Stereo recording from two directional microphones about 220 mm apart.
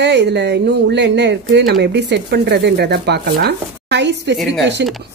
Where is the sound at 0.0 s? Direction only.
50° right (ahead or behind).